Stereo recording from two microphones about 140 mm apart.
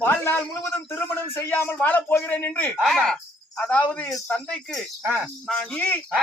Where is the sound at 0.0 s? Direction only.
15° left (ahead or behind).